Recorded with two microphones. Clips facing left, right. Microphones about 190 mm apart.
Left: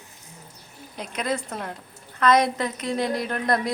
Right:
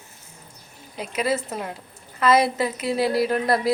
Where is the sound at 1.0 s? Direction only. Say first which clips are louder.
Right 3 dB; 5° right (ahead or behind).